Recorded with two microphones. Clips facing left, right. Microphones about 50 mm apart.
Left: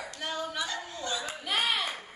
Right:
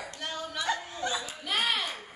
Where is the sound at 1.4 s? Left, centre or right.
Centre.